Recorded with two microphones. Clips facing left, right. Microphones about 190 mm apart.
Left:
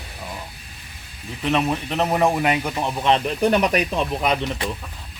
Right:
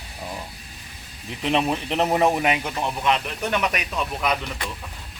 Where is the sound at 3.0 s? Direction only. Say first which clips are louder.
Left 7 dB; 30° left (ahead or behind).